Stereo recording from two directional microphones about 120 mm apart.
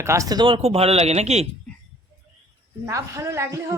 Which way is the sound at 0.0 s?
25° right (ahead or behind).